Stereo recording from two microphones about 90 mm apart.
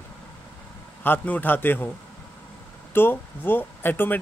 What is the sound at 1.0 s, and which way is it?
Speech, 20° left (ahead or behind).